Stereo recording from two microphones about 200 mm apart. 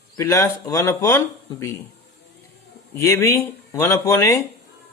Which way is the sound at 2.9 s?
10° left (ahead or behind).